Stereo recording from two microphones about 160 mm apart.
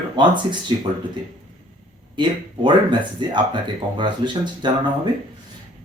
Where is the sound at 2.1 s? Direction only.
30° right (ahead or behind).